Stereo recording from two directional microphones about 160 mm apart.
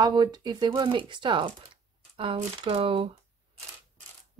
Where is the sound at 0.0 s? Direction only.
25° right (ahead or behind).